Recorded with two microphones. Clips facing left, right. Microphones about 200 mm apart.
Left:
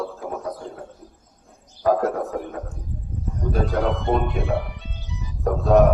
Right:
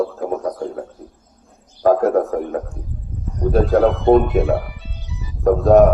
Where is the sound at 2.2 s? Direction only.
50° right (ahead or behind).